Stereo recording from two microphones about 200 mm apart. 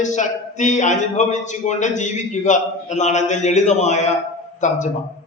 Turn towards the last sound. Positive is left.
turn(degrees=35)  # may be behind; listen again after turning